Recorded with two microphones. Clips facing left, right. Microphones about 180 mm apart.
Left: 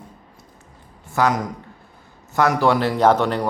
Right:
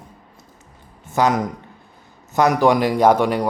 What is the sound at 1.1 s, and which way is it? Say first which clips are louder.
Speech: right 1 dB; 20° right (ahead or behind).